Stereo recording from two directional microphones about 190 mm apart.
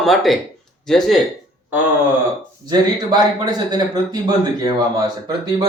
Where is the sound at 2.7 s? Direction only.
20° right (ahead or behind).